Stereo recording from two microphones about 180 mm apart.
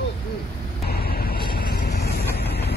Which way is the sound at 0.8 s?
60° left (ahead or behind).